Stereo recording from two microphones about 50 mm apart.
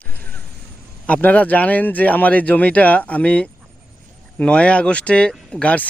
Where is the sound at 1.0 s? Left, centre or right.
Left.